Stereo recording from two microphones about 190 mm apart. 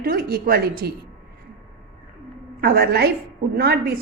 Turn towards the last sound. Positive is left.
turn(degrees=-60)  # may be behind; listen again after turning